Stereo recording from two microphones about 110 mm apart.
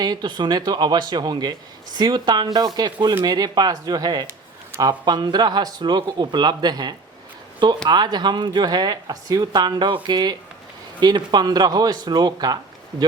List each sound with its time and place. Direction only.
0.0 s speech: 40° right (ahead or behind)